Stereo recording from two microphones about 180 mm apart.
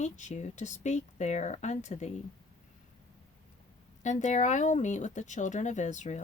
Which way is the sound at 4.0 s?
40° left (ahead or behind).